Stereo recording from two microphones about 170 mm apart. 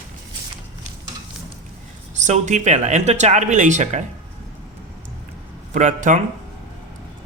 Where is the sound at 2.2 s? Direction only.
45° right (ahead or behind).